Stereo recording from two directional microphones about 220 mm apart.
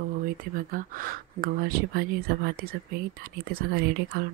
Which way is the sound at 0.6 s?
40° right (ahead or behind).